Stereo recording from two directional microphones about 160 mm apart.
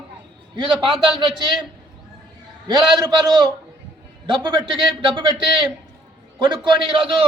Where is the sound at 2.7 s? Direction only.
25° right (ahead or behind).